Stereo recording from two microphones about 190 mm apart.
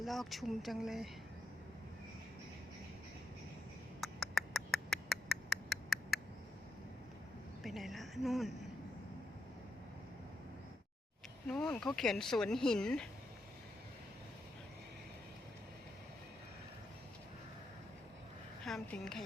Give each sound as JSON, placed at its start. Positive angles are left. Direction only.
{"t": 0.0, "sound": "speech", "side_deg": 0}
{"t": 4.0, "sound": "a sound", "side_deg": 0}
{"t": 7.6, "sound": "a woman's voice", "side_deg": 0}
{"t": 11.4, "sound": "speech", "side_deg": 5}
{"t": 18.6, "sound": "a woman's voice", "side_deg": 0}